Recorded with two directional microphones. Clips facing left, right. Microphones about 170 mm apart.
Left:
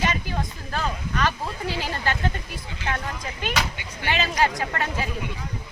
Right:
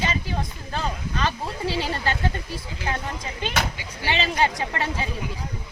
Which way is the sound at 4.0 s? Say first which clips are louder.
Even; 25° right (ahead or behind).